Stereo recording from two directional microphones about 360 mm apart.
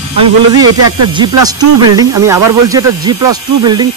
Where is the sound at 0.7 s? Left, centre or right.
Right.